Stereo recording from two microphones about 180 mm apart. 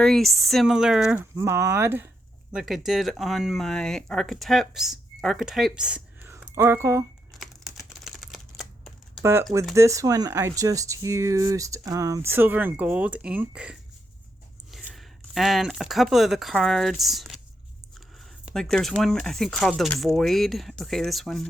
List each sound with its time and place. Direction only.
0.0 s speech: centre (ahead or behind); by 7.0 s 15° right (ahead or behind)
7.3 s typing: centre (ahead or behind)
9.2 s speech: 15° right (ahead or behind); by 17.4 s centre (ahead or behind)
18.4 s speech: 5° left (ahead or behind)